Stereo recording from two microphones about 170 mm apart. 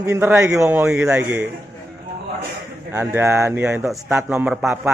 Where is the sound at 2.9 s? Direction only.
15° right (ahead or behind).